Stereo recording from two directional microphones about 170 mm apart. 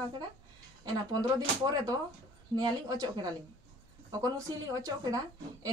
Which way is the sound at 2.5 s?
25° right (ahead or behind).